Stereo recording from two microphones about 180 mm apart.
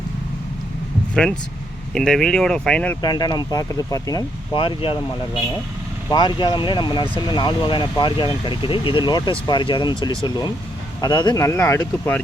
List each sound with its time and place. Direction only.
1.1 s speech: 5° left (ahead or behind)
3.0 s speech: 20° left (ahead or behind)
6.1 s speech: 25° left (ahead or behind)